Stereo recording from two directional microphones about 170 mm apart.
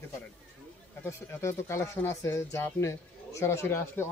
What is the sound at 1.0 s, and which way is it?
Speech, 15° left (ahead or behind).